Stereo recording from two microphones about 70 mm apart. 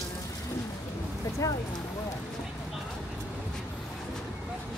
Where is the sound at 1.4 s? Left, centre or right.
Left.